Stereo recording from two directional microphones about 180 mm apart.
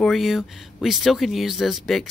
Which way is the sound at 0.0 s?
Centre (ahead or behind).